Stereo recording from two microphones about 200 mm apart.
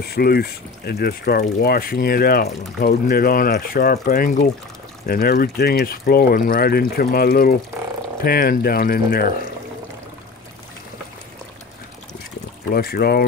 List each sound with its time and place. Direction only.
0.0 s speech: 50° left (ahead or behind)
12.7 s speech: 50° left (ahead or behind)